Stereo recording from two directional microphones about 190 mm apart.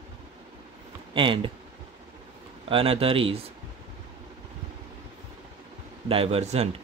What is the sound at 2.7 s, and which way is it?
Speech, 30° right (ahead or behind).